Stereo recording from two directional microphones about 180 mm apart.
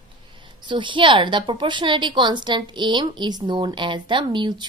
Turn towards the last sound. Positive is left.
turn(degrees=-25)  # may be behind; listen again after turning